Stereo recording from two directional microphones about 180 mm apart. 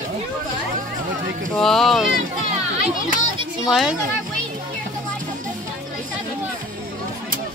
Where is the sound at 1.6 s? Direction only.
Centre (ahead or behind).